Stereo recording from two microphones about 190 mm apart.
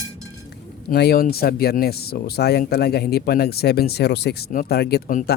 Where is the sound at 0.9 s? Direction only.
55° left (ahead or behind).